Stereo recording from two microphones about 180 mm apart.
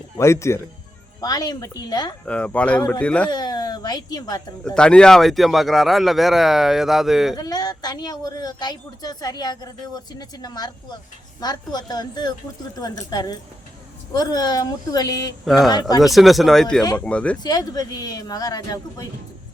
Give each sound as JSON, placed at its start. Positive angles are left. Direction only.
{"t": 0.2, "sound": "a woman's voice", "side_deg": 15}
{"t": 2.2, "sound": "speech", "side_deg": 5}
{"t": 3.2, "sound": "a woman's voice", "side_deg": 20}
{"t": 4.6, "sound": "speech", "side_deg": 5}
{"t": 7.3, "sound": "a woman's voice", "side_deg": 20}
{"t": 15.4, "sound": "speech", "side_deg": 0}
{"t": 17.4, "sound": "a woman's voice", "side_deg": 20}